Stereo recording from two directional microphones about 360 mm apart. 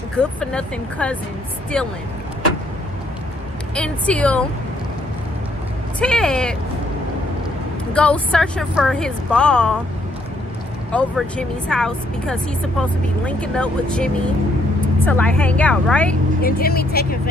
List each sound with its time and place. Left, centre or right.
0.2 s speech: centre
3.7 s speech: centre
5.9 s speech: centre
7.9 s speech: centre
10.9 s speech: centre
16.4 s speech: left